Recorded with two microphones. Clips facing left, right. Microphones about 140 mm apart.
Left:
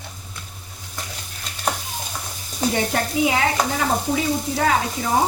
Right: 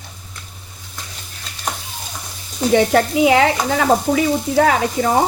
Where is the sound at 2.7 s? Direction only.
85° right; by 5.1 s 70° right (ahead or behind).